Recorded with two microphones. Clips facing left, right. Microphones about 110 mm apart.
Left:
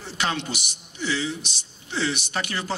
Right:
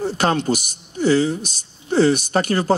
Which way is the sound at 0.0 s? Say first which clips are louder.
Right 9 dB; 45° right (ahead or behind).